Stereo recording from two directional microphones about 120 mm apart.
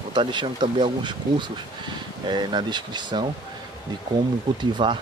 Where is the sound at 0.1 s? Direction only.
40° right (ahead or behind).